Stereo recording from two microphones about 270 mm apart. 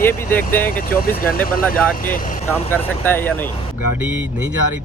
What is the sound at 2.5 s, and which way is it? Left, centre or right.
Speech, centre.